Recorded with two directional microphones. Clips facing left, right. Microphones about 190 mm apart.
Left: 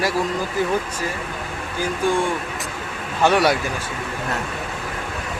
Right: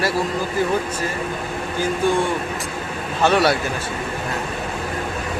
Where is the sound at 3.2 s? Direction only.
15° left (ahead or behind).